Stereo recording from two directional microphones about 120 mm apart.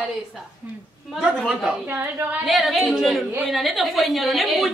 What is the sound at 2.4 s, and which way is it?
A woman's voice, centre (ahead or behind).